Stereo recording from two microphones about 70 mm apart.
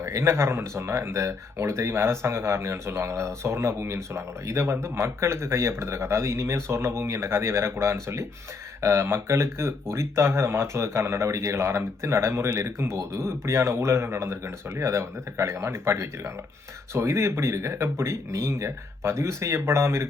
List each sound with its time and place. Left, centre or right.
0.0 s speech: right